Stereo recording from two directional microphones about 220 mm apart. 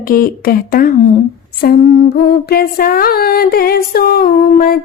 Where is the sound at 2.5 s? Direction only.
45° left (ahead or behind).